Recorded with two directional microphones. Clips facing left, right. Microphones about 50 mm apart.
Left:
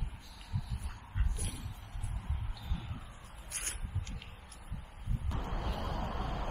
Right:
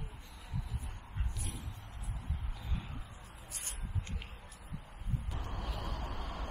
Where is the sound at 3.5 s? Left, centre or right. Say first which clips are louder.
Left 5 dB; left.